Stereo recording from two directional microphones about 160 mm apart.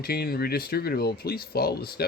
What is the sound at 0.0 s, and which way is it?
Speech, 75° left (ahead or behind).